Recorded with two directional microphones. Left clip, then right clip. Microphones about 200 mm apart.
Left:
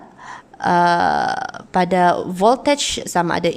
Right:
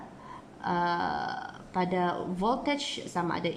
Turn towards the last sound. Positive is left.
turn(degrees=50)  # may be behind; listen again after turning